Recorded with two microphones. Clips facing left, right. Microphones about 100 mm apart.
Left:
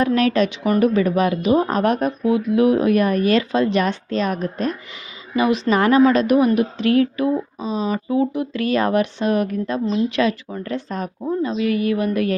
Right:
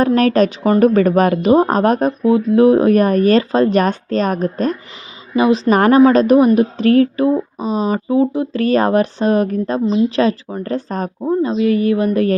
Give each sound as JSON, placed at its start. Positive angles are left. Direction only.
{"t": 0.0, "sound": "a woman's voice", "side_deg": -40}
{"t": 7.6, "sound": "a woman's voice", "side_deg": -40}